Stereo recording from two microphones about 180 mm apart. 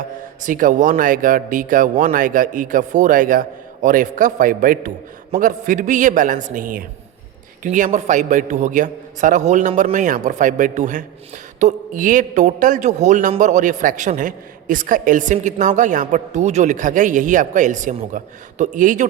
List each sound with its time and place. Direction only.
0.4 s a man's voice: 45° right (ahead or behind)